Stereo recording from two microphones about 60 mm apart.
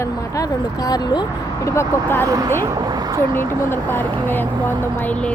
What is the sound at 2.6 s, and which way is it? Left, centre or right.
Speech, right.